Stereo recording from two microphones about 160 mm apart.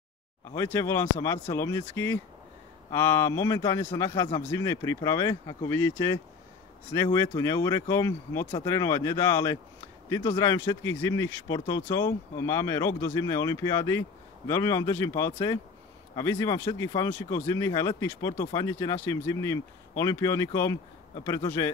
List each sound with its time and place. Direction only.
0.7 s speech: 15° left (ahead or behind)